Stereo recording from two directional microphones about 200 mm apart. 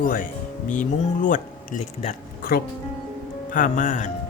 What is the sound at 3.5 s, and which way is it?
Speech, 40° left (ahead or behind).